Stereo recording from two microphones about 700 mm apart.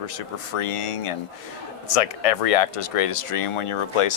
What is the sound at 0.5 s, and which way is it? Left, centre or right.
Speech, left.